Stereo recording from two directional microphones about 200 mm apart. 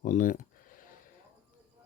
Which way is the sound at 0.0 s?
40° left (ahead or behind).